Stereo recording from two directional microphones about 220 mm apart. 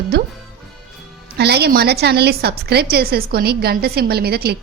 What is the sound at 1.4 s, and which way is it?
A woman's voice, 45° right (ahead or behind).